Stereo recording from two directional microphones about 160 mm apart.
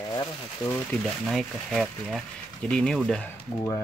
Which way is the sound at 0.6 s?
10° left (ahead or behind).